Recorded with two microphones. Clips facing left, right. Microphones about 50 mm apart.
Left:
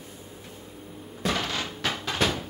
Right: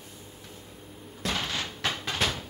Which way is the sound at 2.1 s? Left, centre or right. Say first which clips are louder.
Left 5 dB; centre.